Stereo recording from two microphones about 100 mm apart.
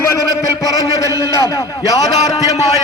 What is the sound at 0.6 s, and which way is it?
A man's voice, 35° left (ahead or behind).